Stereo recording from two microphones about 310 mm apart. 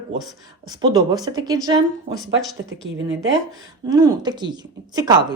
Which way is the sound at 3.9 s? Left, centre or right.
Centre.